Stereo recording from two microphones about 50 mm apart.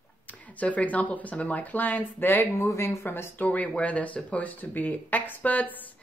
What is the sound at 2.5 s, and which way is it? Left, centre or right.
Speech, left.